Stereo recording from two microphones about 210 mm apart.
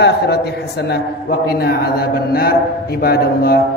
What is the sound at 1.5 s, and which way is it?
A man's voice, 50° left (ahead or behind).